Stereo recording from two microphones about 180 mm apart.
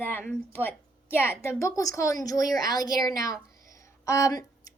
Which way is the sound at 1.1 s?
10° left (ahead or behind).